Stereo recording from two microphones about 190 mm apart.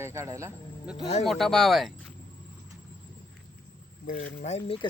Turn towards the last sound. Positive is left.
turn(degrees=30)  # may be behind; listen again after turning